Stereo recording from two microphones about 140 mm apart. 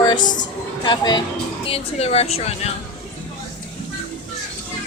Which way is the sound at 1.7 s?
45° left (ahead or behind).